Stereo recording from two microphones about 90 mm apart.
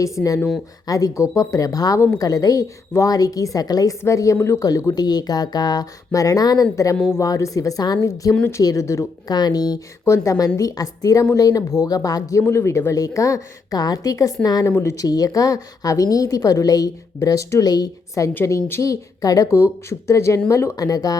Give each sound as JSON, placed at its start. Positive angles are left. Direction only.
{"t": 0.0, "sound": "a woman's voice", "side_deg": 40}
{"t": 9.3, "sound": "a woman's voice", "side_deg": 50}
{"t": 14.7, "sound": "a woman's voice", "side_deg": 30}